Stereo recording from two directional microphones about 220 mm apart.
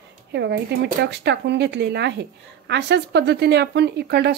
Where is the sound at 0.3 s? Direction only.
50° right (ahead or behind).